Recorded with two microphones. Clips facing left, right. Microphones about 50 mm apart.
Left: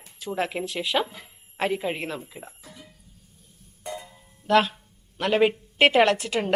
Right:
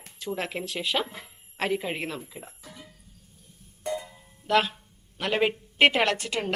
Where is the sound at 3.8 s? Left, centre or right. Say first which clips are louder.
Right 4 dB; centre.